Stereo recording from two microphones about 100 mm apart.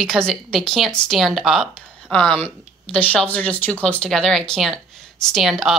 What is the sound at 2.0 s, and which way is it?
Speech, 10° left (ahead or behind).